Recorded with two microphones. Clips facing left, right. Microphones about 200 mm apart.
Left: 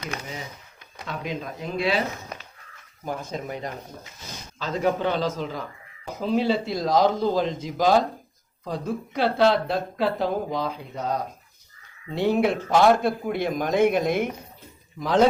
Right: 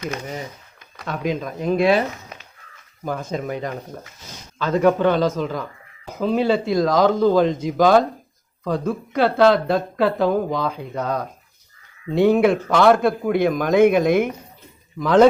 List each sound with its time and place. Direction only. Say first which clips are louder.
1.6 s speech: right 9 dB; 50° right (ahead or behind)
3.2 s speech: right 6 dB; 80° right
4.5 s a man's voice: right 7 dB; 60° right (ahead or behind)